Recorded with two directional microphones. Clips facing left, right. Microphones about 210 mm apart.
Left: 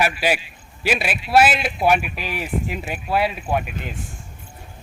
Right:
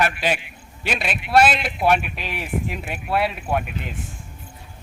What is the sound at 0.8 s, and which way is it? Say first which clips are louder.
Speech: left 3 dB; 5° left (ahead or behind).